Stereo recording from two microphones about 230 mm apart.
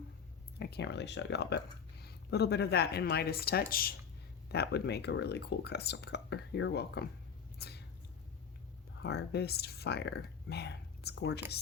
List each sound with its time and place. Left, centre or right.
0.6 s speech: left
7.6 s a sound: left
9.0 s speech: left